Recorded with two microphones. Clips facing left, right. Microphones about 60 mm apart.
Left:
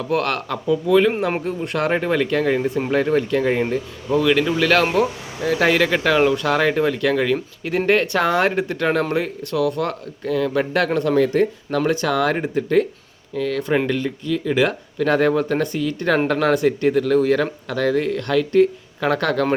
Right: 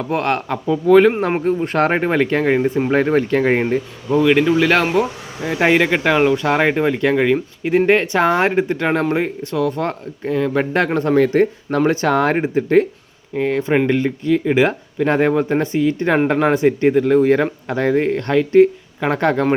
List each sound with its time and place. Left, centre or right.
0.0 s speech: right
0.9 s speech: right
4.1 s speech: centre
11.9 s speech: right